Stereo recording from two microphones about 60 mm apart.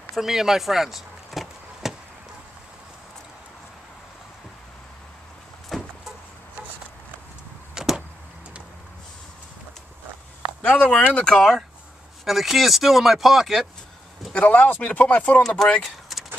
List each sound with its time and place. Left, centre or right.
0.1 s a sound: centre
5.7 s vehicle: centre
7.7 s vehicle: centre
10.6 s speech: centre
12.3 s speech: centre
14.3 s speech: left
15.4 s speech: centre
15.8 s vehicle: centre